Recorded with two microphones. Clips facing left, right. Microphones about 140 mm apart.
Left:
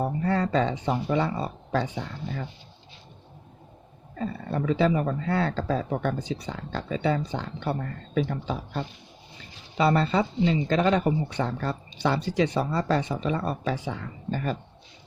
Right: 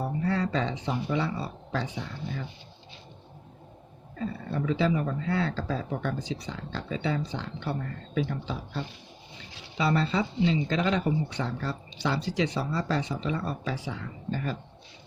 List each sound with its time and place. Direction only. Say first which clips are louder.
0.0 s speech: left 3 dB; 50° left (ahead or behind)
4.5 s speech: left 3 dB; 50° left (ahead or behind)